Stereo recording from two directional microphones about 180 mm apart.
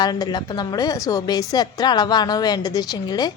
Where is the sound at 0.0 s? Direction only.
20° left (ahead or behind).